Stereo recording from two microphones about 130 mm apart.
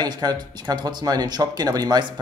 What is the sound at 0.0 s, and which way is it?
Speech, 30° right (ahead or behind).